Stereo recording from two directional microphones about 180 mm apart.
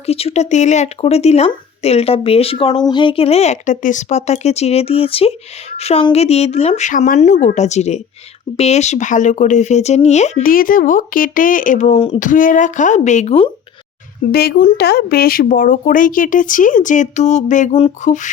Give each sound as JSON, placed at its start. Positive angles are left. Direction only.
{"t": 0.0, "sound": "speech", "side_deg": 35}
{"t": 12.3, "sound": "speech", "side_deg": 50}
{"t": 14.3, "sound": "speech", "side_deg": 55}